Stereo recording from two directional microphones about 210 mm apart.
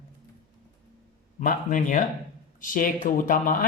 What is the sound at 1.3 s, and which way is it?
Speech, 40° left (ahead or behind).